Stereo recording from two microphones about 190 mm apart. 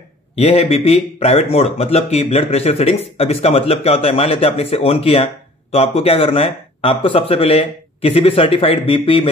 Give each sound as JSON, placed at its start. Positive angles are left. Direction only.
{"t": 0.4, "sound": "speech", "side_deg": 35}